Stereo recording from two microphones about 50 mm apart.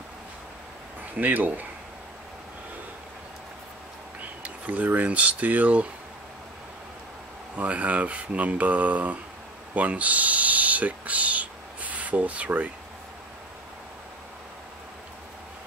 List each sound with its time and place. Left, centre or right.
1.1 s speech: right
4.2 s speech: right
7.5 s speech: right